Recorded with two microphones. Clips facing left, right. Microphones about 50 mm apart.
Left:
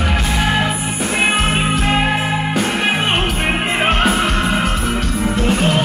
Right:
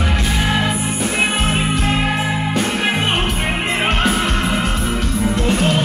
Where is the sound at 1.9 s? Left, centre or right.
Centre.